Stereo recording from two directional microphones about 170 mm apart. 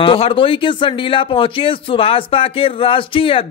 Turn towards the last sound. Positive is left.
turn(degrees=30)  # may be behind; listen again after turning